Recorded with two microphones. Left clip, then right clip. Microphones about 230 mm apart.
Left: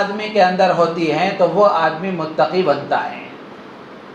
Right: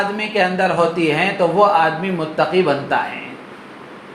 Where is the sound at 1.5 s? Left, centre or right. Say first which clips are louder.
Right 2 dB; right.